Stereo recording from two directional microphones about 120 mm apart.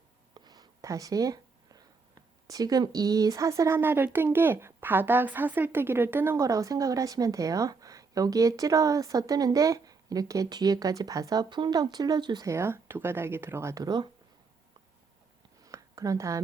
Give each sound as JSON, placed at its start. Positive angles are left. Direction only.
{"t": 0.3, "sound": "speech", "side_deg": -35}
{"t": 12.5, "sound": "speech", "side_deg": -20}
{"t": 15.6, "sound": "a sound", "side_deg": -30}